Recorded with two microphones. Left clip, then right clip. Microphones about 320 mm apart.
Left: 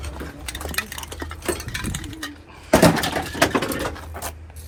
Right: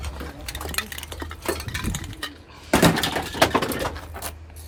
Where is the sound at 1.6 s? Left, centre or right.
Right.